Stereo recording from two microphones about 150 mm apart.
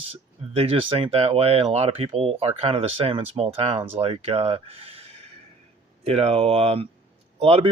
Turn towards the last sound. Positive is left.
turn(degrees=-45)  # may be behind; listen again after turning